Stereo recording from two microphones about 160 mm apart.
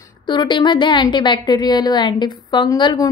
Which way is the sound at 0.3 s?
30° left (ahead or behind).